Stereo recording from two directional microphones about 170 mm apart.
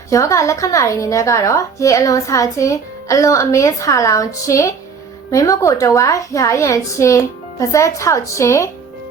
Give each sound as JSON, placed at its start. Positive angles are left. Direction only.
{"t": 0.1, "sound": "a woman's voice", "side_deg": 20}